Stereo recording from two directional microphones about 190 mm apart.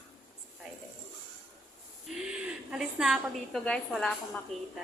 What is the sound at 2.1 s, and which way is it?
A woman's voice, 5° right (ahead or behind).